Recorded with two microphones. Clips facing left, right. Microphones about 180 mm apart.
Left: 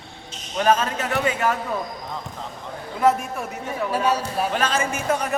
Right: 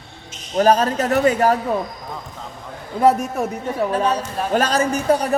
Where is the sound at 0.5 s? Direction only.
40° right (ahead or behind).